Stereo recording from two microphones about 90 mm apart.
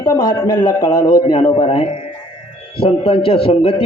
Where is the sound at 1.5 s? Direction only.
70° left (ahead or behind).